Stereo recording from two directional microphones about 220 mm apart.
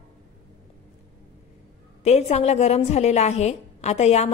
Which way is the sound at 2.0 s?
30° left (ahead or behind).